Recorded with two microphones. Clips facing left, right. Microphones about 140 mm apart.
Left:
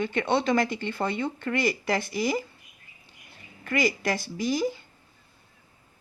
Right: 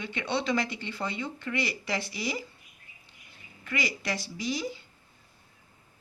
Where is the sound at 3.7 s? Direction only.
50° left (ahead or behind).